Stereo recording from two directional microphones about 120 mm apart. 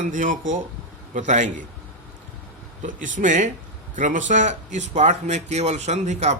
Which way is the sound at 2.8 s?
90° right.